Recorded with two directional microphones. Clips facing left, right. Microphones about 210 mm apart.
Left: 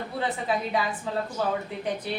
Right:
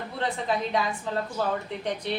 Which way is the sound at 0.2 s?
5° left (ahead or behind).